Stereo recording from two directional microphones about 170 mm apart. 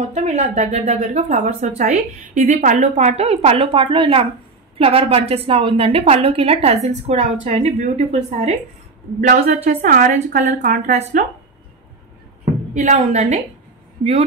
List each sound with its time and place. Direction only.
0.1 s a woman's voice: 45° right (ahead or behind)
11.0 s speech: 40° right (ahead or behind)
12.7 s a woman's voice: 45° right (ahead or behind)